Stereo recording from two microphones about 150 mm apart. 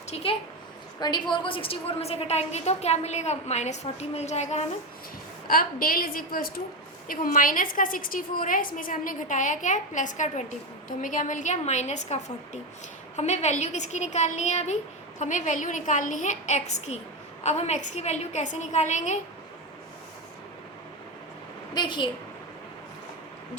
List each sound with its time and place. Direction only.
0.1 s a woman's voice: 40° left (ahead or behind)
0.9 s a woman's voice: 30° left (ahead or behind); by 4.6 s 50° left (ahead or behind)
5.5 s a woman's voice: 75° left (ahead or behind); by 19.2 s 55° left (ahead or behind)
21.8 s a woman's voice: 30° left (ahead or behind)